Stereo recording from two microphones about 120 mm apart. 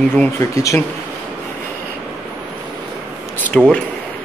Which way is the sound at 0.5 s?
25° left (ahead or behind).